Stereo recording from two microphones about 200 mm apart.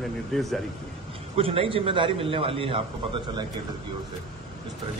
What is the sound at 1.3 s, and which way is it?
A man's voice, 30° right (ahead or behind).